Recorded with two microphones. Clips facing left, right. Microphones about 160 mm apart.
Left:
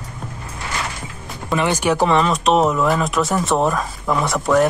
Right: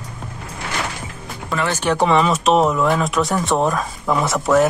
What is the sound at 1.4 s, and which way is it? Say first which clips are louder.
Speech: left 2 dB; 15° left (ahead or behind).